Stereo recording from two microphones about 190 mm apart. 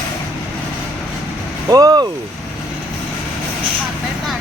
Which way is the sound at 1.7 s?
20° right (ahead or behind).